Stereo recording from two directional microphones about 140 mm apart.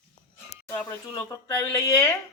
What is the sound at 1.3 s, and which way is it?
Speech, 25° left (ahead or behind).